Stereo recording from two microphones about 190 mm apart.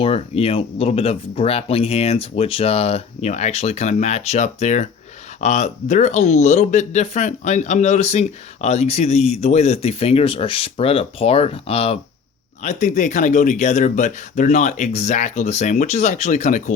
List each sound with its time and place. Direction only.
0.0 s speech: 30° left (ahead or behind)